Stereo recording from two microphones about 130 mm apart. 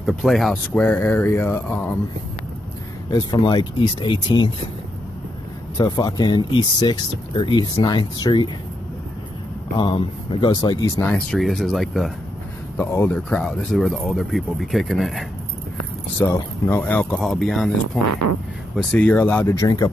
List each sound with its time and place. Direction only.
0.0 s speech: centre (ahead or behind)
3.1 s speech: 35° left (ahead or behind)
5.8 s speech: 35° left (ahead or behind)
9.8 s speech: 40° left (ahead or behind)
11.1 s speech: 5° left (ahead or behind)
12.7 s speech: 15° left (ahead or behind); by 15.2 s centre (ahead or behind)
16.2 s speech: 20° left (ahead or behind); by 17.6 s centre (ahead or behind)
18.8 s speech: 10° left (ahead or behind)
19.6 s speech: 30° left (ahead or behind)